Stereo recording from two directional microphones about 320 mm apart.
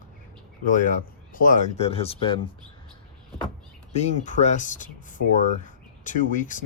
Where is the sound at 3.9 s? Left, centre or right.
Left.